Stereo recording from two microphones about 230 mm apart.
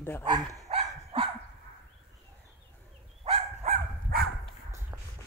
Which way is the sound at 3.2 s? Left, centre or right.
Right.